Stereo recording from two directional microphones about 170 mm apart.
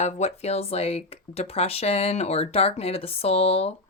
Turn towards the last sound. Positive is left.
turn(degrees=35)  # may be behind; listen again after turning